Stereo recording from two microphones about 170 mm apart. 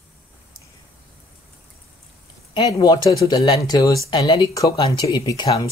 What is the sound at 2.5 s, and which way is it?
Speech, 25° left (ahead or behind).